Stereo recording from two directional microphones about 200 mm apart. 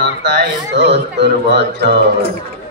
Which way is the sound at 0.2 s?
55° right (ahead or behind).